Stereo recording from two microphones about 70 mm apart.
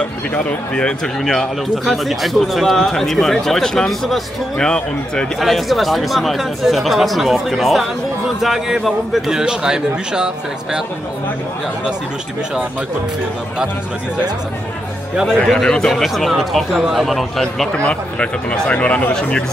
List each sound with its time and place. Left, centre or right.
0.3 s speech: centre
5.4 s speech: centre
15.2 s speech: centre
17.7 s speech: centre